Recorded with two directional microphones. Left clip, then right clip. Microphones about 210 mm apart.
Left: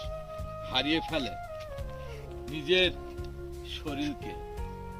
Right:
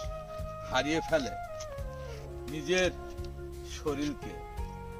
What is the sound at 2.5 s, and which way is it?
Speech, 15° right (ahead or behind).